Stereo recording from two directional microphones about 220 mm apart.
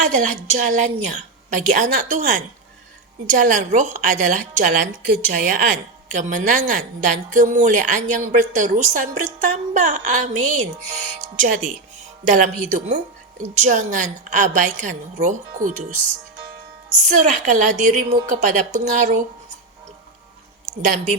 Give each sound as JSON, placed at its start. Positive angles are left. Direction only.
{"t": 0.1, "sound": "a woman's voice", "side_deg": -35}
{"t": 17.1, "sound": "a woman's voice", "side_deg": -35}